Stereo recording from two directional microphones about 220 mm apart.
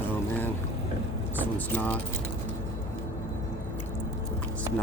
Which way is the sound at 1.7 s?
5° left (ahead or behind).